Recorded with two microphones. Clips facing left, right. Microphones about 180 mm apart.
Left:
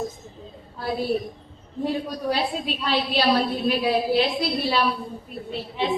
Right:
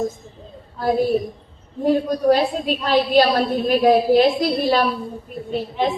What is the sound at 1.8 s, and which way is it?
A woman's voice, 45° right (ahead or behind).